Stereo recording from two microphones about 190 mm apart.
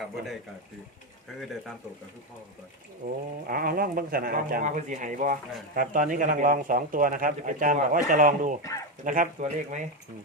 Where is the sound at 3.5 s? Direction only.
50° right (ahead or behind).